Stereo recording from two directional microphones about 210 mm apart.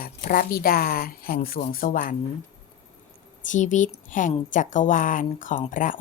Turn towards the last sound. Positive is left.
turn(degrees=40)  # may be behind; listen again after turning